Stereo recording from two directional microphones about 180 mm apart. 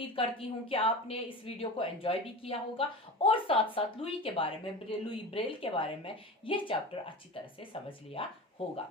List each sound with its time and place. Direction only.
0.0 s a woman's voice: 30° left (ahead or behind)